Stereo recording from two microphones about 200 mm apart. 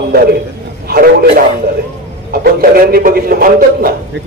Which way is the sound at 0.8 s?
50° right (ahead or behind).